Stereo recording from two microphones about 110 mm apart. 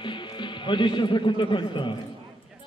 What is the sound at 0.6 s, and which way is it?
A man's voice, 45° left (ahead or behind).